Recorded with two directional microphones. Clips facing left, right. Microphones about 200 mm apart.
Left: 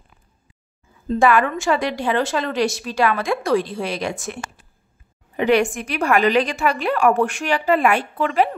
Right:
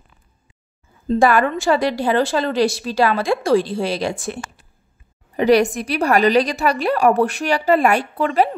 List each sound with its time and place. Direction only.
1.0 s a woman's voice: 40° right (ahead or behind)